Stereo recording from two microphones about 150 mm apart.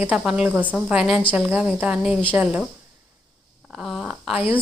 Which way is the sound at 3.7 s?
Centre (ahead or behind).